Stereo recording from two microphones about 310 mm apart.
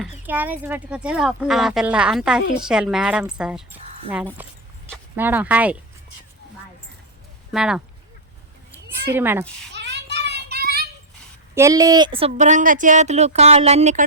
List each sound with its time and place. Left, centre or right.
0.0 s speech: centre
7.5 s speech: centre
9.1 s a woman's voice: centre
9.7 s children playing: right
11.5 s speech: centre